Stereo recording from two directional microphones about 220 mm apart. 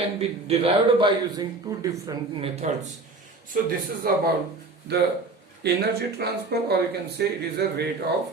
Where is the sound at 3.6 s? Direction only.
40° right (ahead or behind).